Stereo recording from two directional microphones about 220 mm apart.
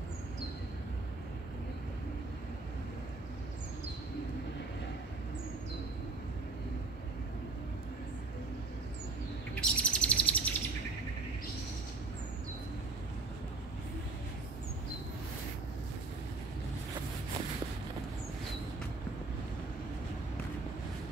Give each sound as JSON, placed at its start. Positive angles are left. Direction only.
{"t": 9.6, "sound": "bird", "side_deg": 5}